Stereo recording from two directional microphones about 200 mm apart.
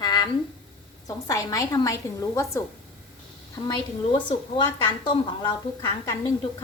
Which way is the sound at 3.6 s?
25° left (ahead or behind).